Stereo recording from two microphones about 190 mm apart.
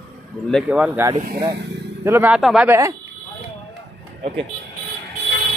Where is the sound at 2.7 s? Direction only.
15° right (ahead or behind).